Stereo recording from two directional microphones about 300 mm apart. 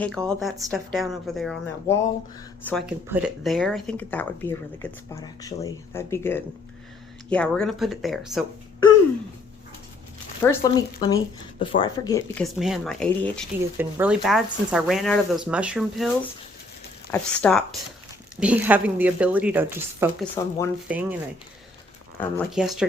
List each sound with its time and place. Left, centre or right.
0.0 s speech: centre
10.4 s speech: centre
12.3 s speech: centre
17.1 s speech: centre
20.4 s speech: centre
20.8 s speech: centre
22.2 s speech: centre